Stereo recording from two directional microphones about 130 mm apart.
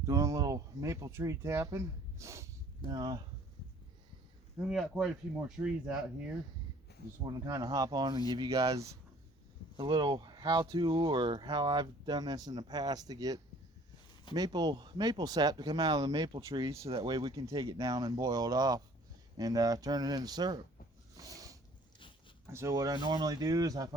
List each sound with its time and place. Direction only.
0.0 s speech: 25° right (ahead or behind)
2.9 s speech: 30° right (ahead or behind)
4.7 s speech: centre (ahead or behind)
7.3 s speech: 25° right (ahead or behind)
9.7 s speech: 35° right (ahead or behind)
21.2 s a sound: 25° right (ahead or behind)
22.4 s speech: 20° right (ahead or behind)